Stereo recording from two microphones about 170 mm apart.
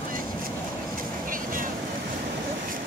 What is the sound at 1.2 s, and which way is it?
Vehicle, 55° right (ahead or behind).